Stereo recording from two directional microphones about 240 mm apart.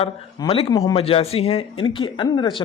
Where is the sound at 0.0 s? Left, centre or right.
Left.